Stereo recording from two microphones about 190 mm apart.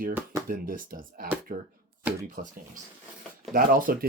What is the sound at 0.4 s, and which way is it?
Speech, 50° right (ahead or behind).